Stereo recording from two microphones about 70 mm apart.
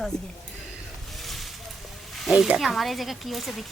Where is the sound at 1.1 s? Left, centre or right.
Centre.